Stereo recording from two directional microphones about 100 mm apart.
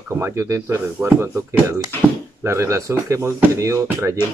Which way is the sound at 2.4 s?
25° right (ahead or behind).